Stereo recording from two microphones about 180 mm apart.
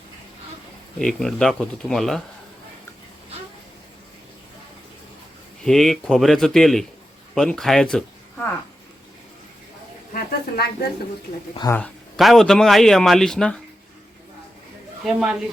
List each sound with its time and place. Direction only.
0.9 s a man's voice: 5° left (ahead or behind)
5.6 s a man's voice: centre (ahead or behind)
10.1 s speech: 60° left (ahead or behind)
11.7 s a man's voice: 5° left (ahead or behind)
15.0 s a man's voice: 5° right (ahead or behind)